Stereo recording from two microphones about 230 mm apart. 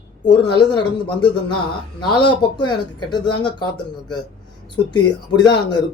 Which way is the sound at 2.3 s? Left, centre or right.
Centre.